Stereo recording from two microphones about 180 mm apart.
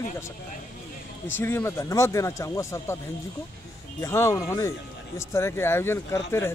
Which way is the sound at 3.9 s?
15° left (ahead or behind).